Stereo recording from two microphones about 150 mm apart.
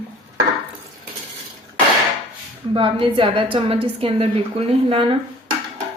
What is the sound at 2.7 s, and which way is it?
A woman's voice, 35° right (ahead or behind).